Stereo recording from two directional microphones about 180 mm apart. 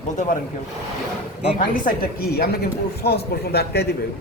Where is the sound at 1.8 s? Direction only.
55° left (ahead or behind).